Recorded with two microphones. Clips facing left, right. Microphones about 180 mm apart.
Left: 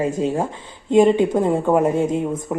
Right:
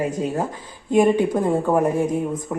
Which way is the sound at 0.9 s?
25° left (ahead or behind).